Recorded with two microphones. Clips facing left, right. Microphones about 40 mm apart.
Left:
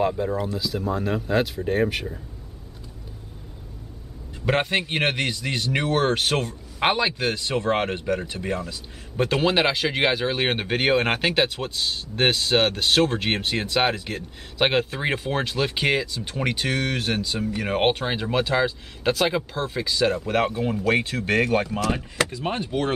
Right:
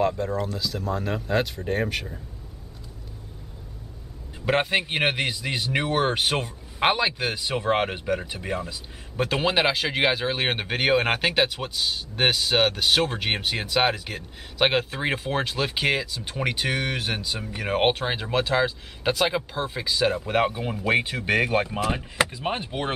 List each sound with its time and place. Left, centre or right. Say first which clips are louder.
0.0 s a man's voice: left 1 dB; centre
4.5 s a man's voice: even; centre